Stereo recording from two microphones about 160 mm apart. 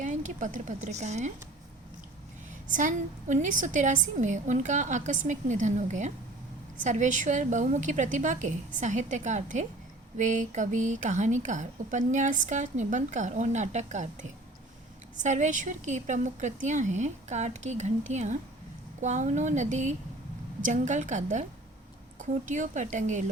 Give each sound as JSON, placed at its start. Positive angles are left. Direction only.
{"t": 0.0, "sound": "speech", "side_deg": -50}
{"t": 2.6, "sound": "a woman's voice", "side_deg": -50}